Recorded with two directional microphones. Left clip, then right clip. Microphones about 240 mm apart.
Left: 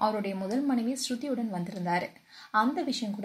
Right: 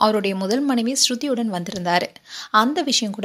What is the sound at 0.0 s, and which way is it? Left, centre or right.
A woman's voice, right.